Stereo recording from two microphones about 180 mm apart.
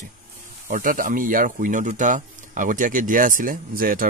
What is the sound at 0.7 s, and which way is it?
Speech, 50° right (ahead or behind).